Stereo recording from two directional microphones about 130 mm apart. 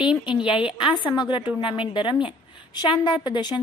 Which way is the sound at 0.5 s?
40° left (ahead or behind).